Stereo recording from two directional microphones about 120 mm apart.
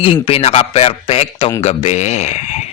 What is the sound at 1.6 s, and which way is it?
Speech, 70° left (ahead or behind).